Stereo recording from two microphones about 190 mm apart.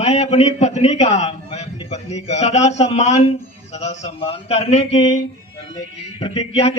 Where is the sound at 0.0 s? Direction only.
35° left (ahead or behind).